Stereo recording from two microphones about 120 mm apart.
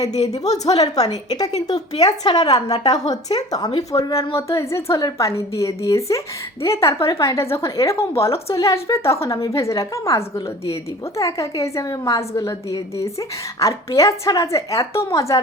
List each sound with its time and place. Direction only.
0.4 s a woman's voice: 30° left (ahead or behind)